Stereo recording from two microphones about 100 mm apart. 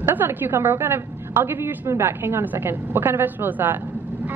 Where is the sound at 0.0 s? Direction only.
20° right (ahead or behind).